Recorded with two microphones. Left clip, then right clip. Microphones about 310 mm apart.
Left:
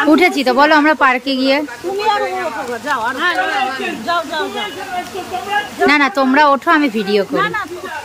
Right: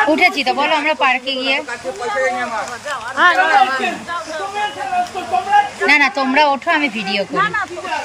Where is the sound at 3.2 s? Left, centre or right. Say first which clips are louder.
Right 8 dB; centre.